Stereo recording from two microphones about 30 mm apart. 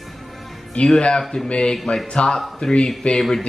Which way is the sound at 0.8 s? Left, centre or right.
Left.